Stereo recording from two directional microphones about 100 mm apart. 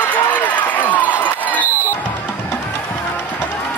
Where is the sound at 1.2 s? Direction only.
15° left (ahead or behind).